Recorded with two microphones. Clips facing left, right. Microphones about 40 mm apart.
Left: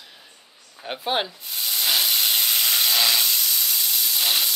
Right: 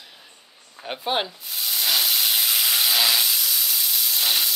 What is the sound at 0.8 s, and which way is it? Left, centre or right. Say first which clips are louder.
Sizzle: even; centre.